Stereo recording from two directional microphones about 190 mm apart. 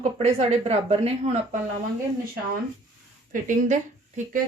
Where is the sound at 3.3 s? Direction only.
45° right (ahead or behind).